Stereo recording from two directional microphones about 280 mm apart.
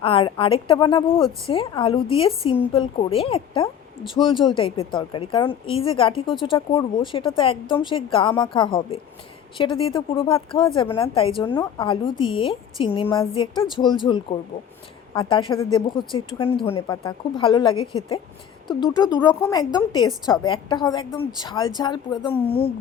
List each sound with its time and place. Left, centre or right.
0.0 s a woman's voice: centre